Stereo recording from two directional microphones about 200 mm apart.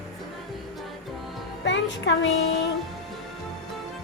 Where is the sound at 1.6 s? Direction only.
65° left (ahead or behind).